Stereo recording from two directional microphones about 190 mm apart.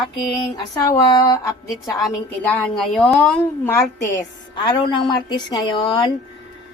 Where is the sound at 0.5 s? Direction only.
20° left (ahead or behind).